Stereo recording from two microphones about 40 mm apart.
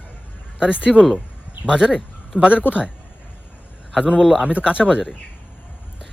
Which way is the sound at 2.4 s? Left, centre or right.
Right.